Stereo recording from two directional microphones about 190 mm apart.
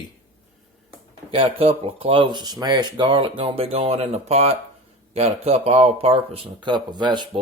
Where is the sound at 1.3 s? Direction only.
30° right (ahead or behind).